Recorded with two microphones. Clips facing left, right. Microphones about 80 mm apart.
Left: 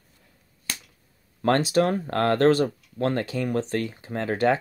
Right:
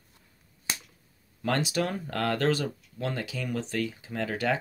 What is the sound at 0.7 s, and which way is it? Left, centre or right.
Finger snapping, centre.